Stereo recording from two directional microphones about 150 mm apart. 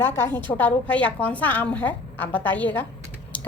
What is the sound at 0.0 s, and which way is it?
A woman's voice, 15° left (ahead or behind).